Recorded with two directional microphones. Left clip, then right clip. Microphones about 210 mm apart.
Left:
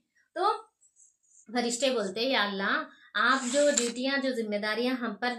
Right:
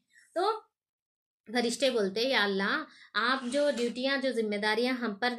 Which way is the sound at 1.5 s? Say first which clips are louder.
Even; 40° right (ahead or behind).